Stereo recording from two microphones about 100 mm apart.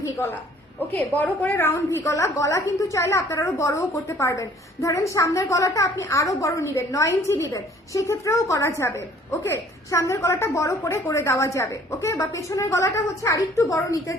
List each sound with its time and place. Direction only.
1.1 s a woman's voice: 15° left (ahead or behind); by 14.2 s 35° left (ahead or behind)